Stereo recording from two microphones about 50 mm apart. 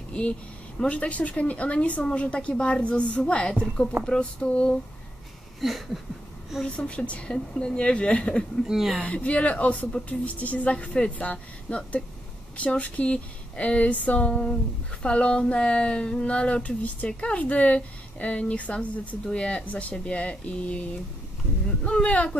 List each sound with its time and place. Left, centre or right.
0.1 s speech: left
5.6 s a sound: centre
6.6 s speech: centre
8.6 s a woman's voice: centre
9.0 s speech: left
21.8 s speech: left